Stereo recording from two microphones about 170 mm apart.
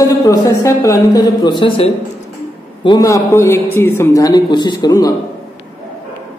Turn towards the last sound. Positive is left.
turn(degrees=20)  # may be behind; listen again after turning